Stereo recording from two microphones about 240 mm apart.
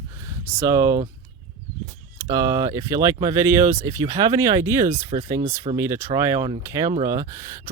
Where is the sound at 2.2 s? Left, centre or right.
Centre.